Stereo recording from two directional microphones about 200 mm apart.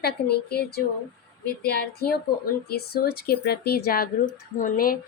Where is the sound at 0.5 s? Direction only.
55° left (ahead or behind).